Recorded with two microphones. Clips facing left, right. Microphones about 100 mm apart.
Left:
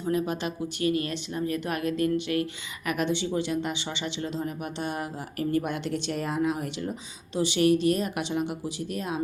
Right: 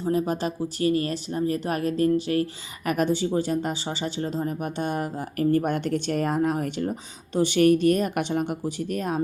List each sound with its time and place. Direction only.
0.0 s speech: 35° right (ahead or behind)